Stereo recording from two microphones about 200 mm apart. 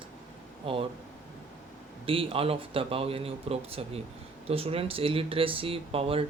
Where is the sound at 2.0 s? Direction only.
30° right (ahead or behind).